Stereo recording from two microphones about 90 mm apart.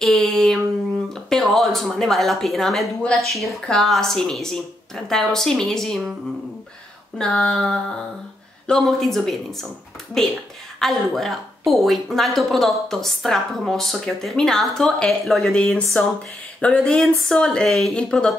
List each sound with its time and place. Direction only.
0.0 s a woman's voice: 5° left (ahead or behind)
7.2 s a woman's voice: 10° left (ahead or behind)